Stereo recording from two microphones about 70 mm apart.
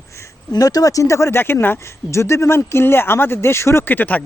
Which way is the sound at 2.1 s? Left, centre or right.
Left.